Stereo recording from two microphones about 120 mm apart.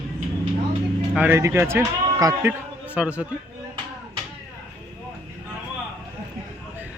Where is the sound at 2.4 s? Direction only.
15° right (ahead or behind).